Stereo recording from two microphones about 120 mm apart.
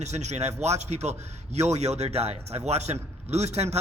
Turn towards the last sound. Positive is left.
turn(degrees=-65)  # may be behind; listen again after turning